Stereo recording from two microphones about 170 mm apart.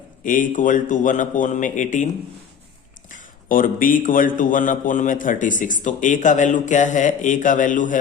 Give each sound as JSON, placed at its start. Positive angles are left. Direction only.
{"t": 0.3, "sound": "a man's voice", "side_deg": 50}
{"t": 3.1, "sound": "a man's voice", "side_deg": 50}